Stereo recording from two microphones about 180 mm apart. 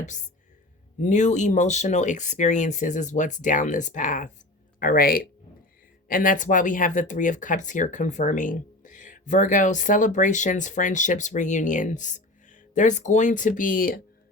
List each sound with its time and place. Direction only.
1.0 s speech: 40° left (ahead or behind)